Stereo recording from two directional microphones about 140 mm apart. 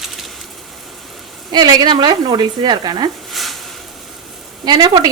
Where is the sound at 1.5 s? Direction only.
30° right (ahead or behind).